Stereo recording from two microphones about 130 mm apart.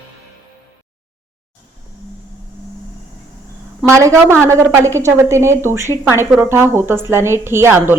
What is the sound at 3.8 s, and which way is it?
A woman's voice, 20° right (ahead or behind).